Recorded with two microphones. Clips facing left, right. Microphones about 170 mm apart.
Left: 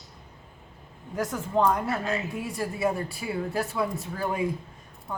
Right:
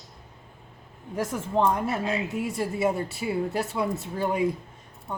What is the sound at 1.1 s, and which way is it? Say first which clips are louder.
Speech: even; 25° right (ahead or behind).